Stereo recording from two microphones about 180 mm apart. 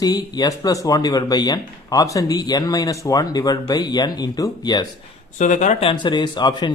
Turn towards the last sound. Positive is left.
turn(degrees=25)  # may be behind; listen again after turning